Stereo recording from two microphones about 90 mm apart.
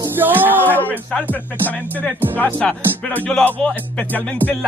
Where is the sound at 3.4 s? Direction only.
15° left (ahead or behind).